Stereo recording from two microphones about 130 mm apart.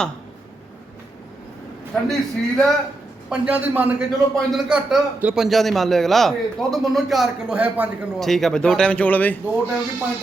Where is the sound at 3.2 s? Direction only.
10° right (ahead or behind).